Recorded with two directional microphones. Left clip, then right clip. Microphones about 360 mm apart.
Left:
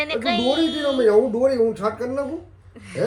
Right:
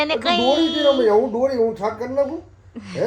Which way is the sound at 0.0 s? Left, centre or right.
Centre.